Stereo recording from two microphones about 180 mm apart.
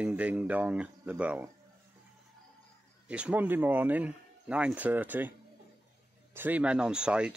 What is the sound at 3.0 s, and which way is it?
A man's voice, 5° right (ahead or behind).